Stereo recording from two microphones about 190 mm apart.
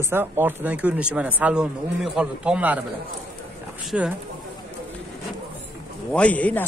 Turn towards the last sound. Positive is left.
turn(degrees=5)  # may be behind; listen again after turning